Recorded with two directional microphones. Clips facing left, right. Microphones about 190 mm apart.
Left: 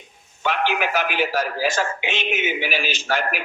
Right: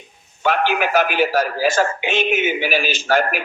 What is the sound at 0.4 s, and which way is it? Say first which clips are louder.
A man's voice: right 4 dB; 45° right (ahead or behind).